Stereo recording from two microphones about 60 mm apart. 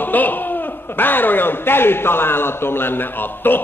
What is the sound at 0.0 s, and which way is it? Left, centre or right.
A man's voice, left.